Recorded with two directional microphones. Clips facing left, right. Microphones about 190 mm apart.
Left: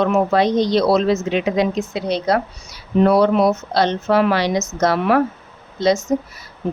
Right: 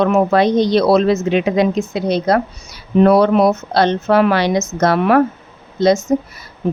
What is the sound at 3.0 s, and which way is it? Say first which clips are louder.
Speech: right 3 dB; 60° right (ahead or behind).